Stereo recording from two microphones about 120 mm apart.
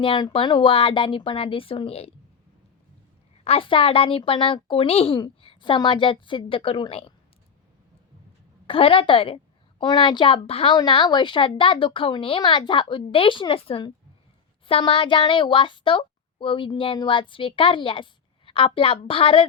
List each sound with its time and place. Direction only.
0.0 s a child's voice: 40° left (ahead or behind)
3.4 s a child's voice: 50° left (ahead or behind)
8.6 s a woman's voice: 50° left (ahead or behind)
10.8 s a child's voice: 40° left (ahead or behind)